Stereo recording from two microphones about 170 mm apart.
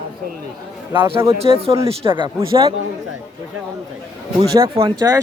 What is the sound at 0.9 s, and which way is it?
A man's voice, 30° right (ahead or behind).